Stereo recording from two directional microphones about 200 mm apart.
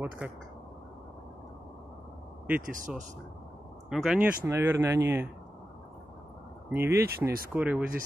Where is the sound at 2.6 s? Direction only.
40° right (ahead or behind).